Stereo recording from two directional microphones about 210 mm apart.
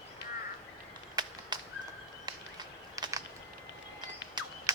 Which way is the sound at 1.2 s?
20° right (ahead or behind).